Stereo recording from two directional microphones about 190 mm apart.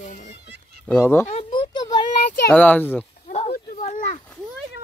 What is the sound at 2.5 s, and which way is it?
Speech, 10° left (ahead or behind).